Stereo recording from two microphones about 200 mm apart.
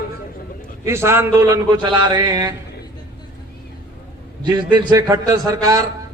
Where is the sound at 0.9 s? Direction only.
15° right (ahead or behind).